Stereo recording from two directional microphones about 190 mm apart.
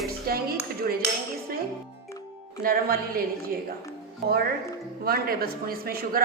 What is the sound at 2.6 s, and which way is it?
Speech, 50° right (ahead or behind).